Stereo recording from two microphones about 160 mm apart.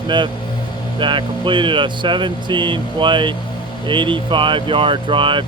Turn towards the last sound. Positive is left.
turn(degrees=-30)  # may be behind; listen again after turning